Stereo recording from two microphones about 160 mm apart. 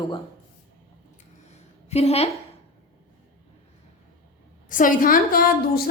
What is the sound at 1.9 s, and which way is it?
Speech, 40° left (ahead or behind).